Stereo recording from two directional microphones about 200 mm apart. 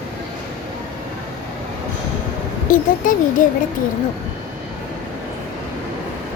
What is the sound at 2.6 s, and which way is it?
Speech, 40° left (ahead or behind).